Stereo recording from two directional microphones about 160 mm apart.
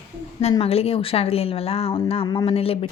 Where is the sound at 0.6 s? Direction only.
40° left (ahead or behind).